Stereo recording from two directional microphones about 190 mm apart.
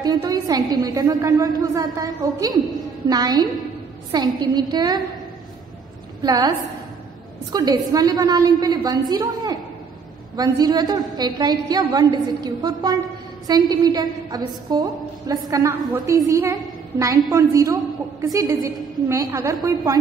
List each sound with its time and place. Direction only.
0.0 s a woman's voice: 20° right (ahead or behind)
6.2 s a woman's voice: 20° right (ahead or behind)
7.5 s a woman's voice: 20° right (ahead or behind)